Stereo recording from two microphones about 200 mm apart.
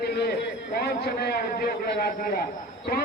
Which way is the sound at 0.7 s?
50° left (ahead or behind).